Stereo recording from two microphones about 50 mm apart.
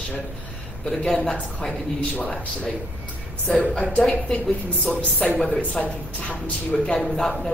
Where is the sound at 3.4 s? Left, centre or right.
Centre.